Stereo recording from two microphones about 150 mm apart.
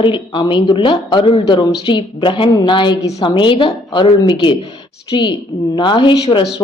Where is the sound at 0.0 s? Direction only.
35° left (ahead or behind).